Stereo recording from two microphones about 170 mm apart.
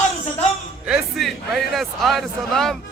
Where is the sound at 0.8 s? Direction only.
Centre (ahead or behind).